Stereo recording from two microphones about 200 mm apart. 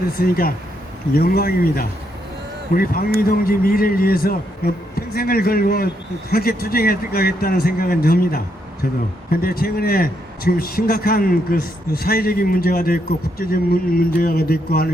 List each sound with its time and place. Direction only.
0.2 s a man's voice: 50° left (ahead or behind)